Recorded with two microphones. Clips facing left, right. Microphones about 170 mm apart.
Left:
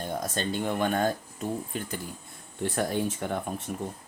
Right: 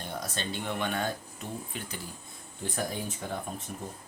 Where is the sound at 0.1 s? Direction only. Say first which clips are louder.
Left 5 dB; 45° left (ahead or behind).